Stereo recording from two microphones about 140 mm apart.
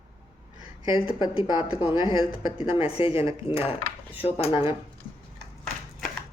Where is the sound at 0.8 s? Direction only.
40° left (ahead or behind).